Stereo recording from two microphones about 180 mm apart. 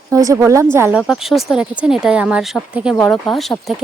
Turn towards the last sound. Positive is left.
turn(degrees=0)  # may be behind; listen again after turning